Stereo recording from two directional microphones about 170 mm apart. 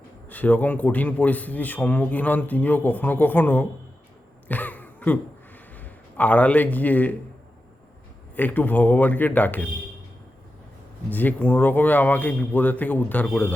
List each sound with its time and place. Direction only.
0.3 s a man's voice: 10° left (ahead or behind)
4.4 s a sound: 10° left (ahead or behind)
5.7 s a man's voice: 10° left (ahead or behind)
8.4 s a man's voice: 10° left (ahead or behind)
11.1 s a man's voice: 10° left (ahead or behind)